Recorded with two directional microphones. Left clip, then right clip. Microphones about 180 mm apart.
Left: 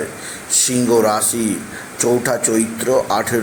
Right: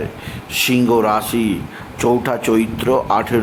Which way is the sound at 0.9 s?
10° right (ahead or behind).